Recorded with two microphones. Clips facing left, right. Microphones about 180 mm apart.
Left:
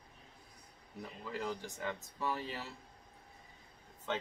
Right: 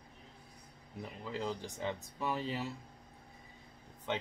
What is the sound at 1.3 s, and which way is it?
Speech, 20° right (ahead or behind).